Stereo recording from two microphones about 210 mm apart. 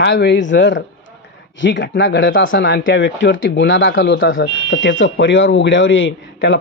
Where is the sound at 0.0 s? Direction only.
55° left (ahead or behind).